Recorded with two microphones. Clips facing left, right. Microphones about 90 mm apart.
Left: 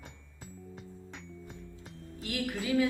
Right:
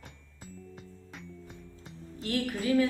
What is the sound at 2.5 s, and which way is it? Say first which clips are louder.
Speech: right 2 dB; 15° left (ahead or behind).